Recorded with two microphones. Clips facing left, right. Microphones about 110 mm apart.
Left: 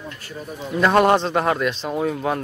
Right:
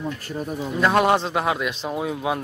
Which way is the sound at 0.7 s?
5° right (ahead or behind).